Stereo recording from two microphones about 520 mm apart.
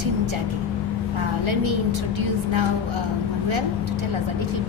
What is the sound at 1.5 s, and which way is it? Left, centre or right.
Speech, right.